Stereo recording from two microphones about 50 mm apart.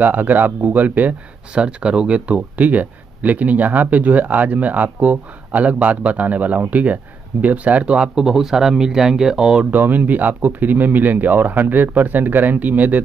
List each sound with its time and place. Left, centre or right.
0.0 s speech: right
1.5 s speech: right
7.8 s speech: centre
9.7 s speech: right